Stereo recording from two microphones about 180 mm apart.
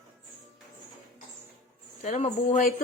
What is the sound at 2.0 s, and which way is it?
Speech, 45° left (ahead or behind).